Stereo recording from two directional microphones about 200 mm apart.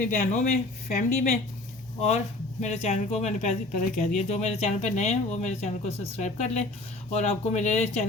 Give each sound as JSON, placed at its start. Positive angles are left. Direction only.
{"t": 0.0, "sound": "speech", "side_deg": 40}